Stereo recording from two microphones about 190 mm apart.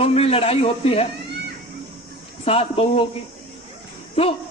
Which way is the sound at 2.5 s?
30° left (ahead or behind).